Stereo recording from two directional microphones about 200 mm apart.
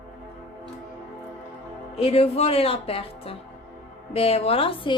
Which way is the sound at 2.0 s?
30° left (ahead or behind).